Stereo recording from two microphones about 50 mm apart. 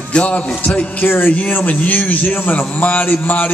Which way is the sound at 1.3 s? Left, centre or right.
Left.